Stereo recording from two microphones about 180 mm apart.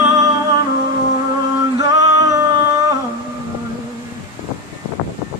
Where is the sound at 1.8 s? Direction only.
20° right (ahead or behind).